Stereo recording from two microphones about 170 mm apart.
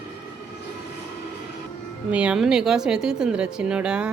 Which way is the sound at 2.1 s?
5° right (ahead or behind).